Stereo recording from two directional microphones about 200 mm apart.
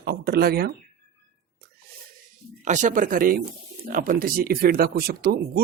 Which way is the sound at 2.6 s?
40° right (ahead or behind).